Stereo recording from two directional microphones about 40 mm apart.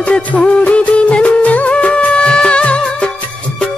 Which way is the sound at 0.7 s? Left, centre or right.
Left.